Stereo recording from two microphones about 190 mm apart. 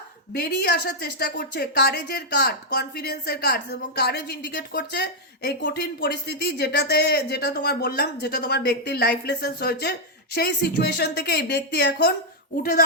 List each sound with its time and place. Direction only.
0.3 s a woman's voice: 55° left (ahead or behind)